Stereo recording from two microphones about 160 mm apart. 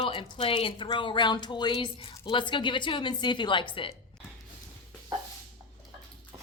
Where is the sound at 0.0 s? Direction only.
35° left (ahead or behind).